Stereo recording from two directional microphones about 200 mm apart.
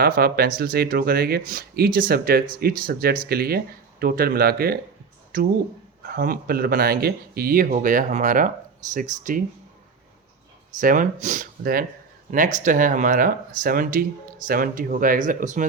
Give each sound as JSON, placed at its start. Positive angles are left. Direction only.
{"t": 0.0, "sound": "speech", "side_deg": -50}
{"t": 10.8, "sound": "speech", "side_deg": -40}